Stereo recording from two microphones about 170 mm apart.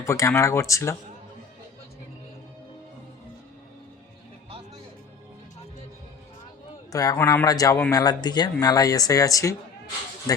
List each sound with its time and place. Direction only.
0.0 s speech: 15° left (ahead or behind)
6.9 s speech: 20° left (ahead or behind)